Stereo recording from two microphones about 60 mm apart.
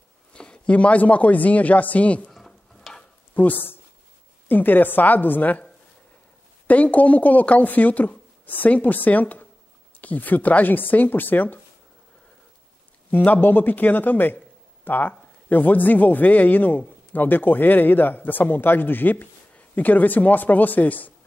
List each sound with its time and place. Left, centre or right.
0.3 s a man's voice: centre
2.2 s a sound: centre
3.3 s speech: left
6.7 s speech: left
13.1 s speech: left